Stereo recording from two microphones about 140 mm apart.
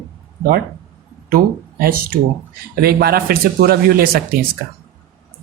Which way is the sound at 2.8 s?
90° right.